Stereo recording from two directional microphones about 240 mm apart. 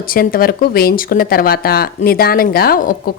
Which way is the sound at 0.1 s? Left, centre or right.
Left.